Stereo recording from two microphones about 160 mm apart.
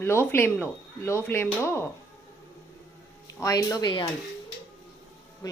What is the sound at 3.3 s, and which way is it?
Speech, 20° left (ahead or behind).